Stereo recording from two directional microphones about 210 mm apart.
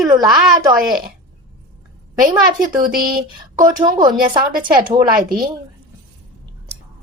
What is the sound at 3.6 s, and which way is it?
Speech, 20° right (ahead or behind).